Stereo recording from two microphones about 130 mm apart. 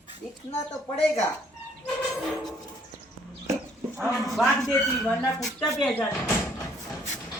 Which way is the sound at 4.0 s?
Centre (ahead or behind).